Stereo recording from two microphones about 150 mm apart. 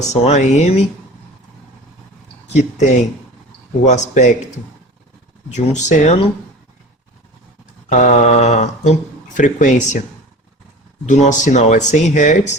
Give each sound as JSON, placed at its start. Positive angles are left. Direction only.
{"t": 0.1, "sound": "speech", "side_deg": 50}
{"t": 2.5, "sound": "speech", "side_deg": 50}
{"t": 5.5, "sound": "speech", "side_deg": 50}
{"t": 7.9, "sound": "speech", "side_deg": 50}
{"t": 11.1, "sound": "speech", "side_deg": 55}